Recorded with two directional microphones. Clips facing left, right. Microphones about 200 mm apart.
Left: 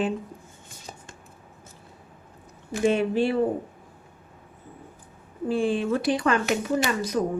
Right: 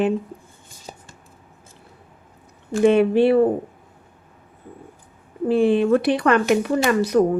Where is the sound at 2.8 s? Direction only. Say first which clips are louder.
Right 7 dB; 60° right (ahead or behind).